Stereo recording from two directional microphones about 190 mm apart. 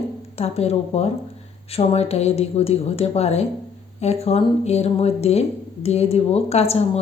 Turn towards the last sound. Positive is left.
turn(degrees=35)  # may be behind; listen again after turning